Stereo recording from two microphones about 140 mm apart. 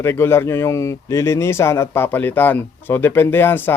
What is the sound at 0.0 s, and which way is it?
Speech, 20° left (ahead or behind).